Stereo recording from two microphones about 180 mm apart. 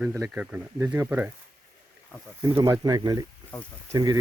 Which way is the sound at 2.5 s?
20° right (ahead or behind).